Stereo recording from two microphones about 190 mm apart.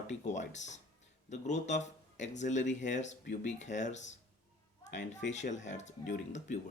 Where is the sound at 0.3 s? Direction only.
40° left (ahead or behind).